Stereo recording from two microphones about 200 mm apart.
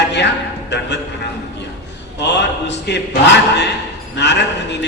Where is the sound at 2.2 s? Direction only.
60° left (ahead or behind).